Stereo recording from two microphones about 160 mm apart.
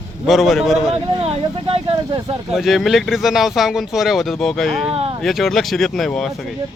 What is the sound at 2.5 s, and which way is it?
Speech, centre (ahead or behind).